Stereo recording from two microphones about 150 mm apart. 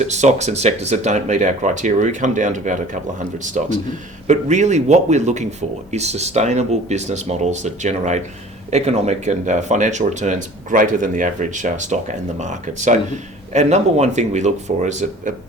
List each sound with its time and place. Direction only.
0.0 s speech: 50° right (ahead or behind)